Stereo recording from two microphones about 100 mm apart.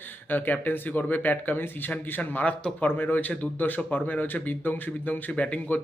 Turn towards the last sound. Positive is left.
turn(degrees=15)  # may be behind; listen again after turning